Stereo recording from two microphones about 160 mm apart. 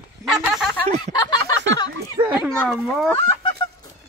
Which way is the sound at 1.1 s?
25° left (ahead or behind).